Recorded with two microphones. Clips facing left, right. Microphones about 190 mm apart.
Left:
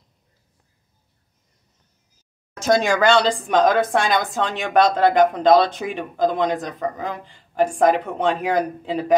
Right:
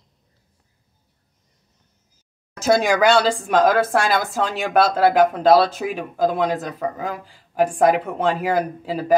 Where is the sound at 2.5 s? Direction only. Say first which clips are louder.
Right 1 dB; 5° right (ahead or behind).